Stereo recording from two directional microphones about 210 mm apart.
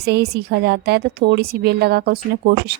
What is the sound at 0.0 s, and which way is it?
A woman's voice, 50° right (ahead or behind).